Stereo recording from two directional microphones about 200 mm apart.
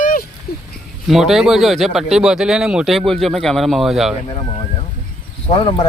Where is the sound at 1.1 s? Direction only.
Centre (ahead or behind).